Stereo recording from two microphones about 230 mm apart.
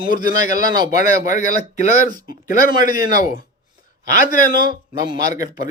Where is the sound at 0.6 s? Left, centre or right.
Centre.